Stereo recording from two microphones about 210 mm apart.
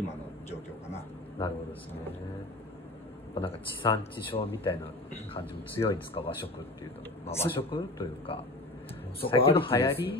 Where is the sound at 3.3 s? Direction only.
25° left (ahead or behind).